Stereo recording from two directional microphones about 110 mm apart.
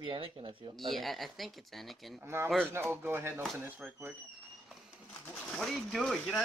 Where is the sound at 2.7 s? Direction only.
20° right (ahead or behind).